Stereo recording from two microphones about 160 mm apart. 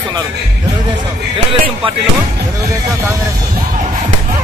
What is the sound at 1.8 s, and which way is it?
Speech, 35° right (ahead or behind).